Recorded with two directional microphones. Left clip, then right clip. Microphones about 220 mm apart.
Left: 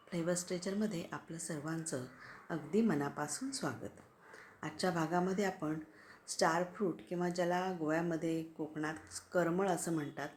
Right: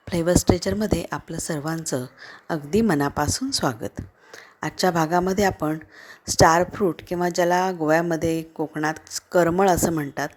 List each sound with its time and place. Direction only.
0.1 s a woman's voice: 40° right (ahead or behind)